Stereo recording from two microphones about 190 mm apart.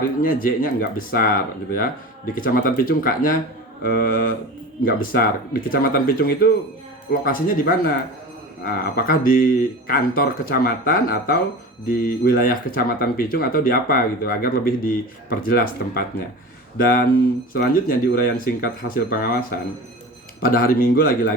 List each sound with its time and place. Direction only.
0.2 s speech: 50° left (ahead or behind)
2.3 s speech: 50° left (ahead or behind)